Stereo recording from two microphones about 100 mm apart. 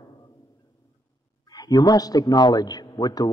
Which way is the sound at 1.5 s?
40° left (ahead or behind).